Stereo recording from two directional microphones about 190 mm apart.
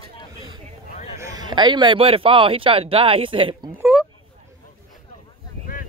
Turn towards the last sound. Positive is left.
turn(degrees=-5)  # may be behind; listen again after turning